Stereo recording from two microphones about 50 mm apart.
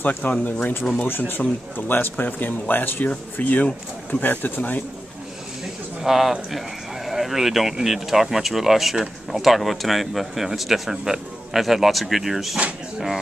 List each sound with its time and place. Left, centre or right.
0.0 s speech: left
6.0 s speech: centre